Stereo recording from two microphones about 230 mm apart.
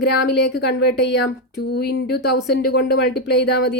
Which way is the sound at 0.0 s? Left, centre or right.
Left.